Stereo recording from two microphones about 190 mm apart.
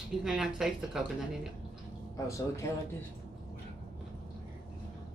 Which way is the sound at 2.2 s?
15° left (ahead or behind).